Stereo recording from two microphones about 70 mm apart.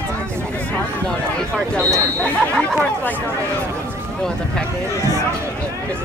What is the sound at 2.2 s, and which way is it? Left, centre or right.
Chatter, centre.